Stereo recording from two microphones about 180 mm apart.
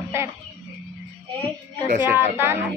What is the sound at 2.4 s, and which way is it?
Speech, 10° right (ahead or behind).